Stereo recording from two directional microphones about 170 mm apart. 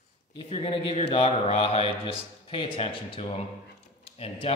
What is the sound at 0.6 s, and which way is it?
A man's voice, 30° left (ahead or behind).